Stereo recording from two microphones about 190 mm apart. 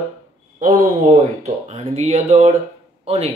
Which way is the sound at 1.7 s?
35° right (ahead or behind).